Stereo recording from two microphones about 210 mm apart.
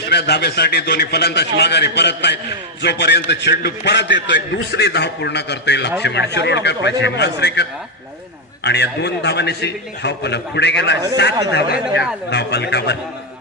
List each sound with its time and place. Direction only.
0.1 s a man's voice: 50° left (ahead or behind)